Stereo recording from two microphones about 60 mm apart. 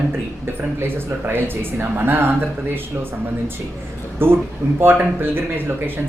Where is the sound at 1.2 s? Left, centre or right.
Right.